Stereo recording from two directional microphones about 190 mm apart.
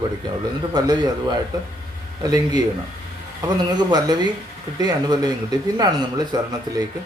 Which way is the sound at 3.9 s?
20° right (ahead or behind).